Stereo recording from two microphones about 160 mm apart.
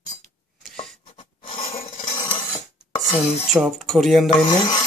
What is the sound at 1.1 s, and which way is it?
Filing, 30° left (ahead or behind).